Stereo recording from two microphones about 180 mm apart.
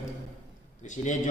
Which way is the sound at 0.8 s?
45° left (ahead or behind).